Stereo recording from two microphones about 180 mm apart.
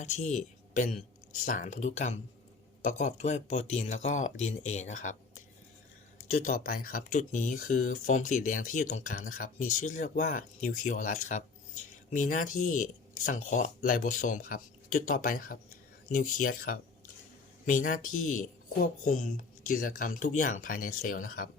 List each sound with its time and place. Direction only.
0.0 s speech: 40° left (ahead or behind)
6.3 s speech: 50° left (ahead or behind)